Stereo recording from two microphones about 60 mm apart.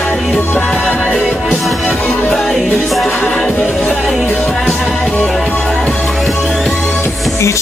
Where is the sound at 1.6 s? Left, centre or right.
Centre.